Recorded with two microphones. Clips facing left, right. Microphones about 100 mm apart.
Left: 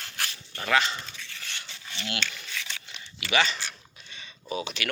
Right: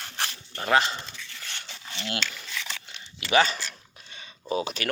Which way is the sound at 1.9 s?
35° right (ahead or behind).